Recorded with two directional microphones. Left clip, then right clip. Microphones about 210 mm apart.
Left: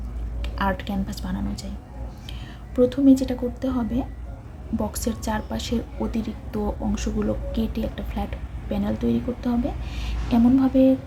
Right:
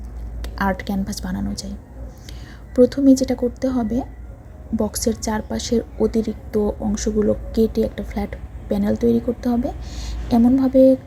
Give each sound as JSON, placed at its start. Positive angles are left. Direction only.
{"t": 0.4, "sound": "a woman's voice", "side_deg": -25}
{"t": 2.7, "sound": "a woman's voice", "side_deg": -25}